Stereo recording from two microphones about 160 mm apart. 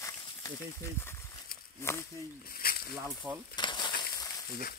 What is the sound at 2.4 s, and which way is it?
Snake, 70° left (ahead or behind).